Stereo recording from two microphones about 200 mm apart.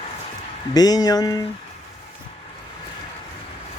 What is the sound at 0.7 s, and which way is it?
Speech, 20° left (ahead or behind).